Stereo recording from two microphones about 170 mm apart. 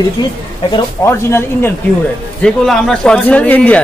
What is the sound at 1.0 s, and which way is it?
Speech, 15° left (ahead or behind).